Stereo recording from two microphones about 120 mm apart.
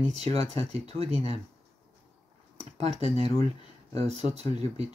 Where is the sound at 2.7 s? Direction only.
55° right (ahead or behind).